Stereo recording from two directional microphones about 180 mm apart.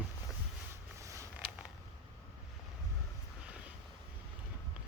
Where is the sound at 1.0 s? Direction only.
15° right (ahead or behind).